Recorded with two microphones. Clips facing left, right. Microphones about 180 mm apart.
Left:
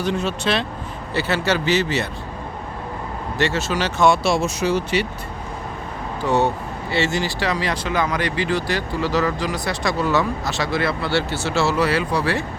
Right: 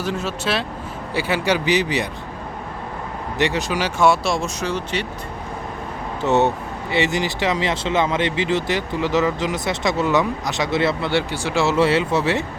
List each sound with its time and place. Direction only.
0.0 s speech: 5° right (ahead or behind)
3.3 s speech: 15° right (ahead or behind); by 5.0 s 5° left (ahead or behind)
6.2 s speech: 20° right (ahead or behind)